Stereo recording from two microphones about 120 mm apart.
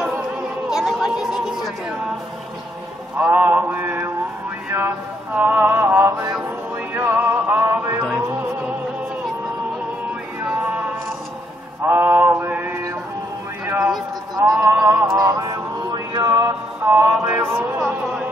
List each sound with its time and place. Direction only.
0.7 s chatter: 5° right (ahead or behind)
3.2 s mantra: 15° right (ahead or behind)
6.9 s music: 15° right (ahead or behind)
10.4 s music: 10° right (ahead or behind)
11.9 s male singing: 15° right (ahead or behind)
13.7 s a sound: 5° right (ahead or behind)
14.8 s music: 20° right (ahead or behind)
17.3 s a sound: 20° right (ahead or behind)
18.0 s a sound: 5° right (ahead or behind)